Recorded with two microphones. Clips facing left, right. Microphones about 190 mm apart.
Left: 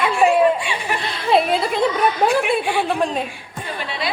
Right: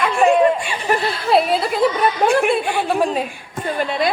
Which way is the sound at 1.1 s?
Centre (ahead or behind).